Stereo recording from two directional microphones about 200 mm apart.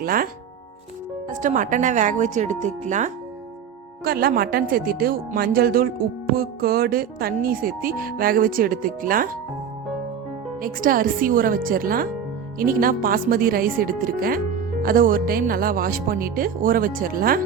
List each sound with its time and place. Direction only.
0.0 s speech: 45° right (ahead or behind)
1.3 s speech: 40° right (ahead or behind)
4.0 s speech: 50° right (ahead or behind)
10.6 s speech: 45° right (ahead or behind)